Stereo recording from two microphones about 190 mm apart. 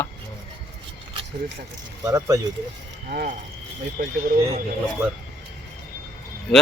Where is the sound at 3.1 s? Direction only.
50° right (ahead or behind).